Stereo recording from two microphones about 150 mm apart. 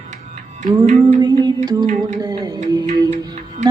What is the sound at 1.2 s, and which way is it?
Music, 25° right (ahead or behind).